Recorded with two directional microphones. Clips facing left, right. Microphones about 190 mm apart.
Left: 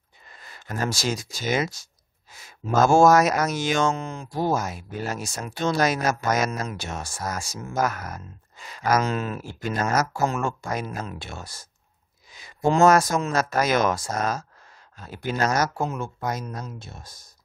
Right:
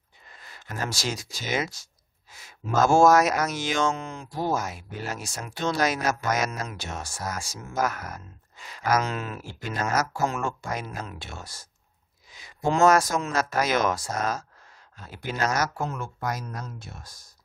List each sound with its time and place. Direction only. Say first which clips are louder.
0.5 s speech: left 4 dB; 45° left (ahead or behind)
3.0 s speech: even; 45° left (ahead or behind)
12.6 s speech: left 2 dB; 40° left (ahead or behind)
15.8 s speech: left 3 dB; 20° left (ahead or behind)